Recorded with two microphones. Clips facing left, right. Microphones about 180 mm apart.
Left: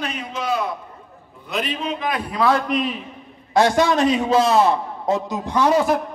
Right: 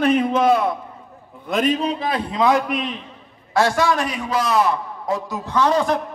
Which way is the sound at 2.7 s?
Centre (ahead or behind).